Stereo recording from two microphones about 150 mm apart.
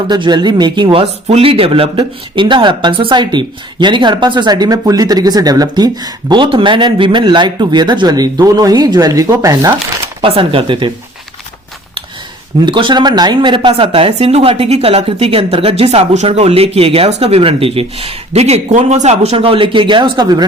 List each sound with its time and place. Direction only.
0.1 s speech: 30° right (ahead or behind)
10.2 s a woman's voice: 40° right (ahead or behind)
12.6 s a woman's voice: 30° right (ahead or behind)